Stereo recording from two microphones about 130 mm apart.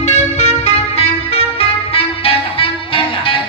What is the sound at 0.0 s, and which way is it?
Music, 60° left (ahead or behind).